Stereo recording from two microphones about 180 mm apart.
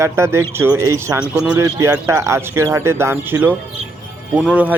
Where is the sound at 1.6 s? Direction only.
15° right (ahead or behind).